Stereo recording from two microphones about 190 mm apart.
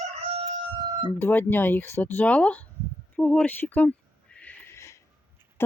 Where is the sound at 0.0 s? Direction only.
30° right (ahead or behind).